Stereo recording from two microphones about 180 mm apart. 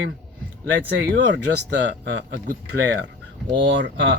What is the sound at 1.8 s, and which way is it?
Speech, 70° right (ahead or behind).